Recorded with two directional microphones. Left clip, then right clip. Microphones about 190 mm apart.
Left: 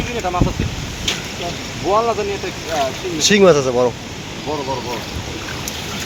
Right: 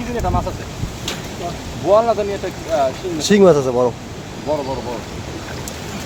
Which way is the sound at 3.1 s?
25° right (ahead or behind).